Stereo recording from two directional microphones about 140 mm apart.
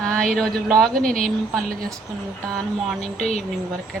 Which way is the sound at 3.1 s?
50° left (ahead or behind).